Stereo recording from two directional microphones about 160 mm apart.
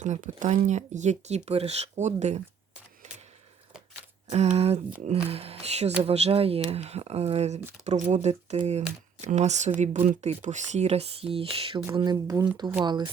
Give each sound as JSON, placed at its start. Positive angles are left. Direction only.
{"t": 0.0, "sound": "speech", "side_deg": -50}
{"t": 4.3, "sound": "speech", "side_deg": -45}
{"t": 11.9, "sound": "speech", "side_deg": -25}